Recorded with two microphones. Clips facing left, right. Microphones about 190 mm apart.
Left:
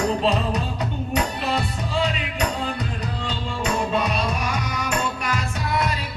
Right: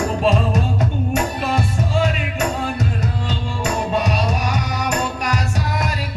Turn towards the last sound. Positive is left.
turn(degrees=-40)  # may be behind; listen again after turning